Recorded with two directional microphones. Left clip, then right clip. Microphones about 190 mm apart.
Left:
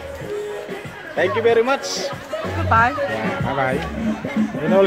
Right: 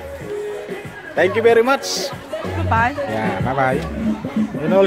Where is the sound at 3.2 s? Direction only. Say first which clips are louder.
Right 2 dB; 20° right (ahead or behind).